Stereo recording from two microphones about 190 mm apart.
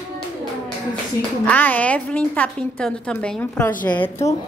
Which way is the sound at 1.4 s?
10° left (ahead or behind).